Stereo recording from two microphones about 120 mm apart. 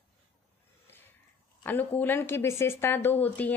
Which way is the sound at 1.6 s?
15° left (ahead or behind).